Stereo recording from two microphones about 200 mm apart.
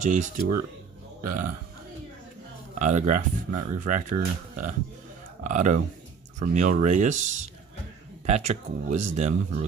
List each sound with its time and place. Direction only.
0.0 s speech: 40° right (ahead or behind)
2.7 s speech: 40° right (ahead or behind)